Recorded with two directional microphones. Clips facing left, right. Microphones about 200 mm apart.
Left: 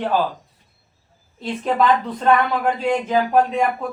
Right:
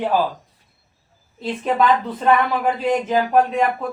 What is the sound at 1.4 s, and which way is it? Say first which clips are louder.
Speech: even; 5° right (ahead or behind).